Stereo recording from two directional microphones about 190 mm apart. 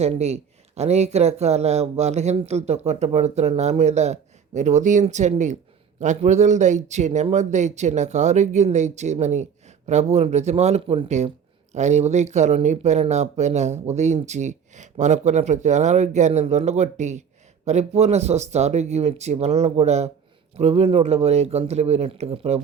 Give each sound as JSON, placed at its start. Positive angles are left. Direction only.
{"t": 0.0, "sound": "speech", "side_deg": -35}